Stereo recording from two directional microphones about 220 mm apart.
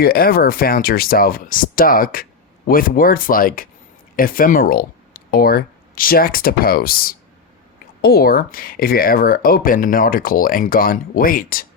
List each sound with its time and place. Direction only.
0.0 s speech: 45° left (ahead or behind)